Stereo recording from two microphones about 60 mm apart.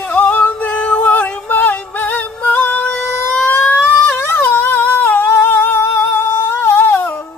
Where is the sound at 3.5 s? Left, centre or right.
Left.